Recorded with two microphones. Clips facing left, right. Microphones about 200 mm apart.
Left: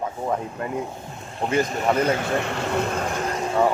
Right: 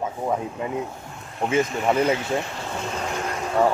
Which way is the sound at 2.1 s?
60° left (ahead or behind).